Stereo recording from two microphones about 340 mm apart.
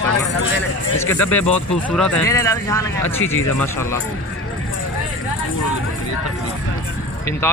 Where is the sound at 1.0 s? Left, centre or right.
Centre.